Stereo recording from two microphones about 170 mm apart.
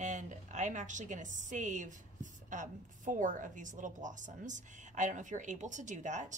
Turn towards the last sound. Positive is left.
turn(degrees=-45)  # may be behind; listen again after turning